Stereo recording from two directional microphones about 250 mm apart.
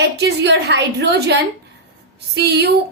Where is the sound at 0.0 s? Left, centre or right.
Right.